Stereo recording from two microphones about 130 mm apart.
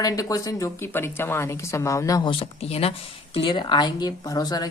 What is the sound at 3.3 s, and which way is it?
Speech, 40° left (ahead or behind).